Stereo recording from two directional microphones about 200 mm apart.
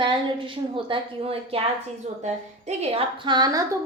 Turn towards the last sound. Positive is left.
turn(degrees=-20)  # may be behind; listen again after turning